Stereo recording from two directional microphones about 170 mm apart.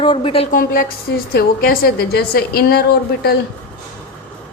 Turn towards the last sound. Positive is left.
turn(degrees=65)  # may be behind; listen again after turning